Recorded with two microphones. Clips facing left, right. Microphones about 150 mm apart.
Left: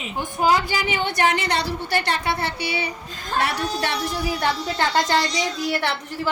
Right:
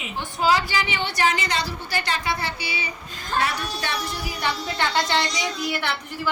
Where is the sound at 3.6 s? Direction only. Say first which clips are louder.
Left 5 dB; 30° left (ahead or behind).